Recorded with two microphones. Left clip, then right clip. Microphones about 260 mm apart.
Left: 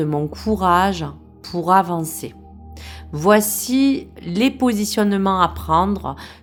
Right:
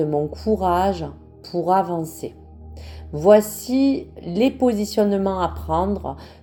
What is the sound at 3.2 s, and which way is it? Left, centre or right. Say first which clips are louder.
Speech: right 1 dB; left.